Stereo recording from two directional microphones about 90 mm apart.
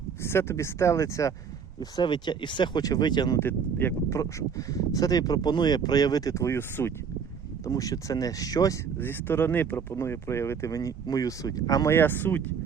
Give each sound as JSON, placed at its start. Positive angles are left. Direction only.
{"t": 0.2, "sound": "speech", "side_deg": 30}
{"t": 1.8, "sound": "speech", "side_deg": 55}
{"t": 3.3, "sound": "speech", "side_deg": 25}
{"t": 7.6, "sound": "speech", "side_deg": 40}
{"t": 9.0, "sound": "speech", "side_deg": 25}
{"t": 9.9, "sound": "speech", "side_deg": 30}
{"t": 11.9, "sound": "speech", "side_deg": 25}